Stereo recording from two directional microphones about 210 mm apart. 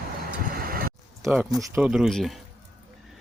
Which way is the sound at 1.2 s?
5° right (ahead or behind).